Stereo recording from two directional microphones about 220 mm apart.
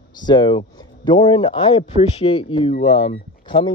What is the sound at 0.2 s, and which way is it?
Speech, 20° left (ahead or behind).